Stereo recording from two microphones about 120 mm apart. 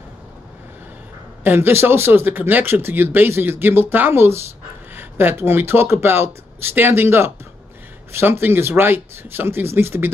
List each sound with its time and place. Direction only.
1.4 s speech: 15° right (ahead or behind)